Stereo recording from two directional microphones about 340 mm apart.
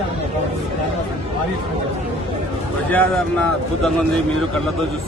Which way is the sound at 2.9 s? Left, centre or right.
Centre.